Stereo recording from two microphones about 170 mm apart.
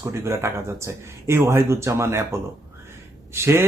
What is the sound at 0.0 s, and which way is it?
A man's voice, 15° right (ahead or behind).